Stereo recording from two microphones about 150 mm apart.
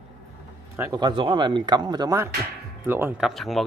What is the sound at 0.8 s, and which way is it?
Speech, 25° right (ahead or behind).